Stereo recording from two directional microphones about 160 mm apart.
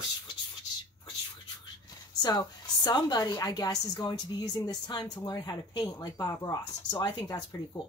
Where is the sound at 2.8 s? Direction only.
25° left (ahead or behind).